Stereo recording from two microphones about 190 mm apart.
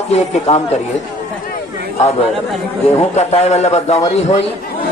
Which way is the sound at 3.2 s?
35° left (ahead or behind).